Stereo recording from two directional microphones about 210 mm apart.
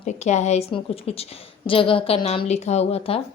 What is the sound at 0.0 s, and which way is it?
A woman's voice, 35° left (ahead or behind).